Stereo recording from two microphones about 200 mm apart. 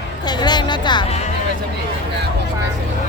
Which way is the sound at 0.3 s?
20° left (ahead or behind).